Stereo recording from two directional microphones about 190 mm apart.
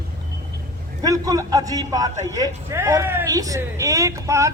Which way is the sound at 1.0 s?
20° right (ahead or behind).